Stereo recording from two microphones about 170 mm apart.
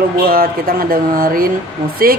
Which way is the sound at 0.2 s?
60° right (ahead or behind).